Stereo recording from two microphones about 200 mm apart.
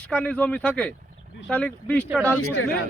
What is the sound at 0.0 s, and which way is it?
Speech, 5° left (ahead or behind).